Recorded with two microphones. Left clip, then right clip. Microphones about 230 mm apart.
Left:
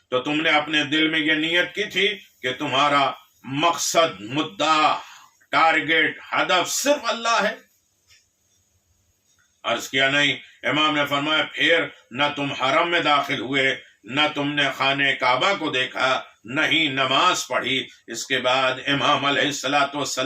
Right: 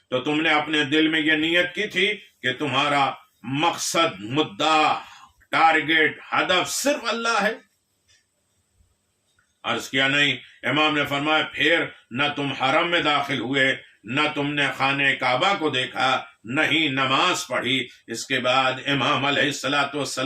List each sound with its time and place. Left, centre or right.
0.1 s a man's voice: centre
9.6 s a man's voice: centre